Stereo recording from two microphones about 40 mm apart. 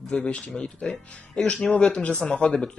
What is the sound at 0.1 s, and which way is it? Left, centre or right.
Speech, left.